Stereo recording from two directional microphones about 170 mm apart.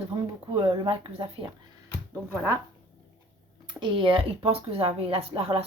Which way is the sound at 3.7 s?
25° right (ahead or behind).